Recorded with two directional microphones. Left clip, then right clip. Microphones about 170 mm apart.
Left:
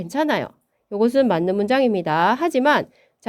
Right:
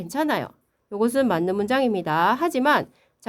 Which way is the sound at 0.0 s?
25° left (ahead or behind).